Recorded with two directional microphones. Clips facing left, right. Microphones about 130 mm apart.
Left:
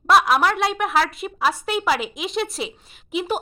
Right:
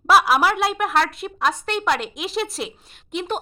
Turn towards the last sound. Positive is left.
turn(degrees=5)  # may be behind; listen again after turning